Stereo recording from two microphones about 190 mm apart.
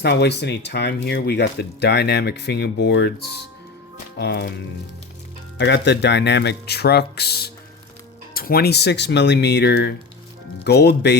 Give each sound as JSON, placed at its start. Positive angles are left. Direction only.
{"t": 0.0, "sound": "speech", "side_deg": 60}